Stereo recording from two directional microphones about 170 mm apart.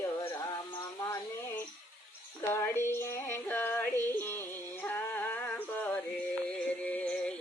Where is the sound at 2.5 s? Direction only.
15° left (ahead or behind).